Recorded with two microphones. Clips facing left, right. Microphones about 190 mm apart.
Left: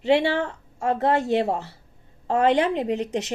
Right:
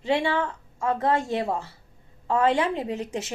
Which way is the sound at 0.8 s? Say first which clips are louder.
Left 2 dB; 25° left (ahead or behind).